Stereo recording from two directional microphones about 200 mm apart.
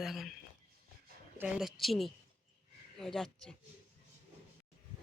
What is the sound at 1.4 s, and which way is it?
Speech, 5° right (ahead or behind).